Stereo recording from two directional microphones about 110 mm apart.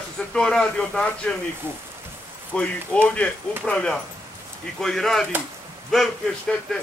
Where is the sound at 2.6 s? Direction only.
10° left (ahead or behind).